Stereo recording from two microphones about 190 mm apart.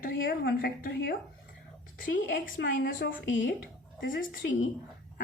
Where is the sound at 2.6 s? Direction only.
70° left (ahead or behind).